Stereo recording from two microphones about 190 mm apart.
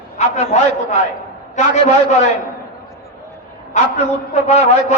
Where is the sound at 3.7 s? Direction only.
35° left (ahead or behind).